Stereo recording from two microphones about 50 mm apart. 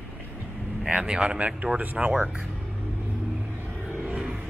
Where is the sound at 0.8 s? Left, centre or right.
Right.